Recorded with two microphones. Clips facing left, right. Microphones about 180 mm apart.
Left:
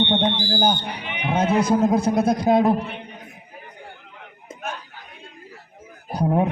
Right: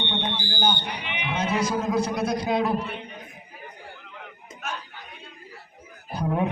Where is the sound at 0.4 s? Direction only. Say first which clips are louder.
Left 5 dB; 40° left (ahead or behind).